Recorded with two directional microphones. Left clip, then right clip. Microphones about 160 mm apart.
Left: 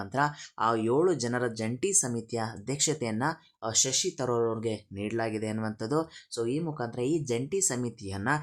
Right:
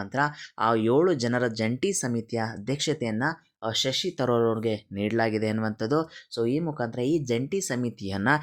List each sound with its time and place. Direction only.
0.0 s speech: 10° right (ahead or behind); by 8.4 s 25° right (ahead or behind)